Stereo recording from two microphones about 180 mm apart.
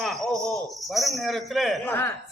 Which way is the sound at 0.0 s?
Centre (ahead or behind).